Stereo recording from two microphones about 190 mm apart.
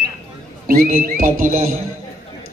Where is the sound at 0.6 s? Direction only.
50° right (ahead or behind).